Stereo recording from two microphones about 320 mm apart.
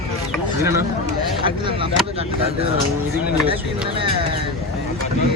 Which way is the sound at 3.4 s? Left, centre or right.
Centre.